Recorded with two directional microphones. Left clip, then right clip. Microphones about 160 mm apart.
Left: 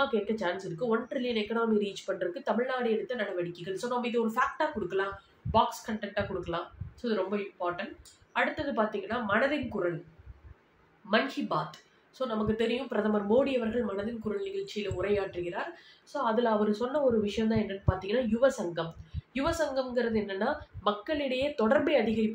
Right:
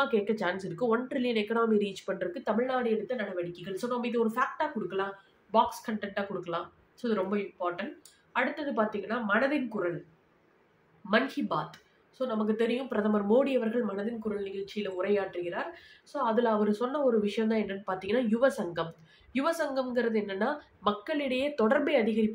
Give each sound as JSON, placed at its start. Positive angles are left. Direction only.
{"t": 0.0, "sound": "speech", "side_deg": -20}
{"t": 5.5, "sound": "speech", "side_deg": -10}
{"t": 11.1, "sound": "speech", "side_deg": -10}